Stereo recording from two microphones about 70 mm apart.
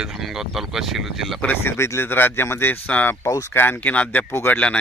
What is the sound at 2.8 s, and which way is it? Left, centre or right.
Speech, left.